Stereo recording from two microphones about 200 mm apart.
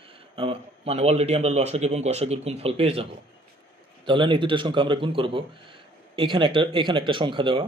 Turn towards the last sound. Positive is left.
turn(degrees=-25)  # may be behind; listen again after turning